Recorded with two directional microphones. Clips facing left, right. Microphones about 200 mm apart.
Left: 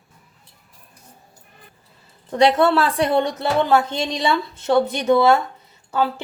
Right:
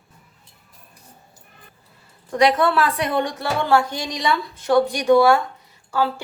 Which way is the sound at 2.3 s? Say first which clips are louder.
Left 2 dB; 25° left (ahead or behind).